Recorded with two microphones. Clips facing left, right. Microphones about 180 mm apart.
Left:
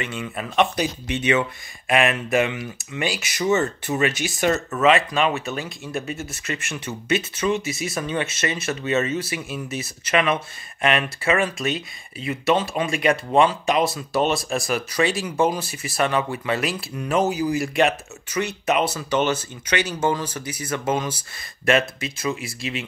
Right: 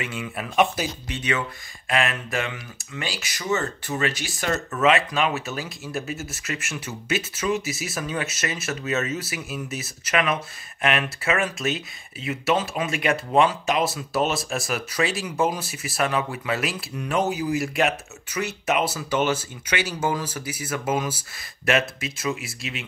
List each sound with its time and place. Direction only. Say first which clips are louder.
0.0 s speech: left 2 dB; 5° right (ahead or behind)
1.0 s speech: left 6 dB; 20° left (ahead or behind)
4.6 s speech: right 1 dB; centre (ahead or behind)